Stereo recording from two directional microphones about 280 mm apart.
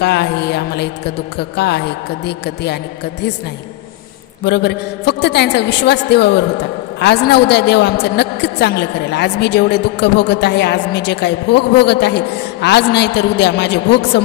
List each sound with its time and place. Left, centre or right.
0.0 s music: left
2.2 s a woman's voice: left
4.5 s a woman's voice: left